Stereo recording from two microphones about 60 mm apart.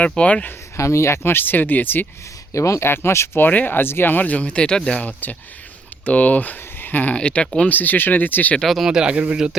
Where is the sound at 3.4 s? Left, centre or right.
Left.